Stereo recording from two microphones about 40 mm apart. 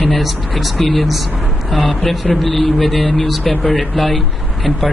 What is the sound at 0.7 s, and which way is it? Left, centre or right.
Speech, centre.